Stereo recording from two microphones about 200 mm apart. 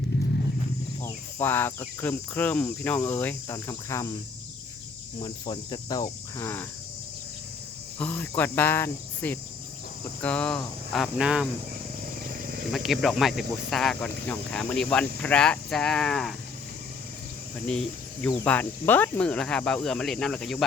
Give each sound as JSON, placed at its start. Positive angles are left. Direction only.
{"t": 1.0, "sound": "speech", "side_deg": 10}
{"t": 5.2, "sound": "cricket", "side_deg": 20}
{"t": 7.9, "sound": "speech", "side_deg": 10}
{"t": 12.7, "sound": "speech", "side_deg": 0}
{"t": 17.7, "sound": "speech", "side_deg": 5}